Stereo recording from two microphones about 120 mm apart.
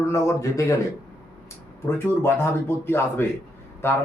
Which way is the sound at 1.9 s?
20° left (ahead or behind).